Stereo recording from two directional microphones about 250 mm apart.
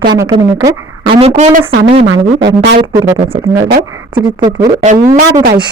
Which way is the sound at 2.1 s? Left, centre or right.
Right.